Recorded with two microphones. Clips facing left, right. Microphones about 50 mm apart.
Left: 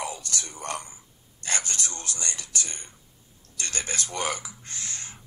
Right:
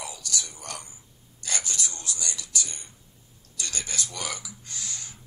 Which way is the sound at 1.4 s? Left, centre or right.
Left.